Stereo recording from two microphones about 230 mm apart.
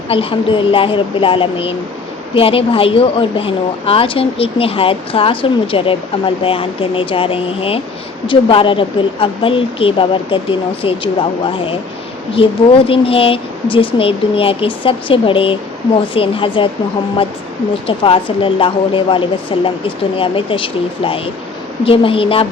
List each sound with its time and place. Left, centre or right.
0.1 s a woman's voice: left
12.3 s a woman's voice: left
17.8 s a woman's voice: left